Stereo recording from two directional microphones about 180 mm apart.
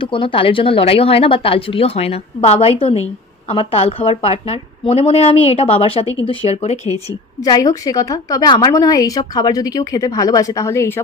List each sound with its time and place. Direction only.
0.0 s a woman's voice: 30° left (ahead or behind)
7.1 s a woman's voice: 20° left (ahead or behind)